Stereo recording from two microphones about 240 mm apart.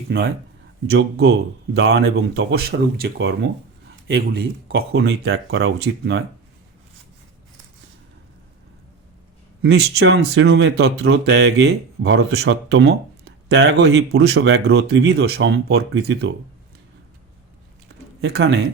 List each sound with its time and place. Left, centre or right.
0.1 s speech: right
9.6 s speech: right
18.2 s speech: right